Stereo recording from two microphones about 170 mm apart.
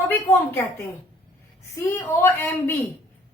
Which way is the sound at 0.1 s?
15° left (ahead or behind).